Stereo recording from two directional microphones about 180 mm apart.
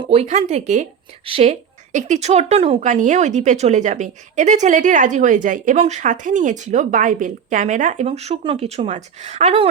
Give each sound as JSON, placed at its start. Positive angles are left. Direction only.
{"t": 0.0, "sound": "speech", "side_deg": -35}